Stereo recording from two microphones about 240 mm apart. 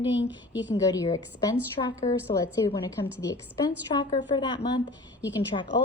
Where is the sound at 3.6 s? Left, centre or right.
Centre.